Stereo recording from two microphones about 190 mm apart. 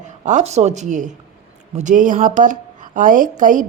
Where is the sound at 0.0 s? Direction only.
40° right (ahead or behind).